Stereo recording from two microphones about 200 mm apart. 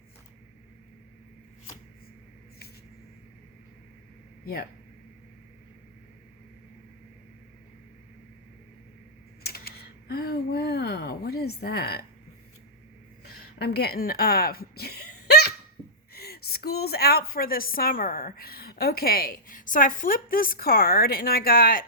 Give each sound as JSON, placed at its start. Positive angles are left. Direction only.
{"t": 9.4, "sound": "typing", "side_deg": 50}
{"t": 13.2, "sound": "a sound", "side_deg": 55}
{"t": 16.1, "sound": "a woman's voice", "side_deg": 50}